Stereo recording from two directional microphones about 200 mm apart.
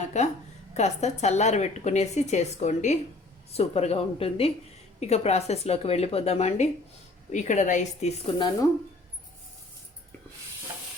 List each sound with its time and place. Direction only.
0.1 s a woman's voice: 35° left (ahead or behind)